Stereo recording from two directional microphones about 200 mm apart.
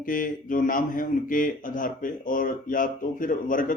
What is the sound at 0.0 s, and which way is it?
Speech, 45° left (ahead or behind).